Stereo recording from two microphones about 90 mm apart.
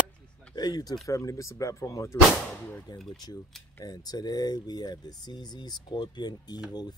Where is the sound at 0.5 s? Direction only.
50° left (ahead or behind).